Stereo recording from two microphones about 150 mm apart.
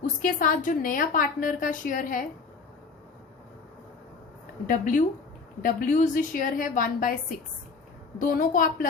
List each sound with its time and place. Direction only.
0.0 s a woman's voice: 60° left (ahead or behind)
4.6 s a woman's voice: 60° left (ahead or behind)
8.2 s a woman's voice: 65° left (ahead or behind)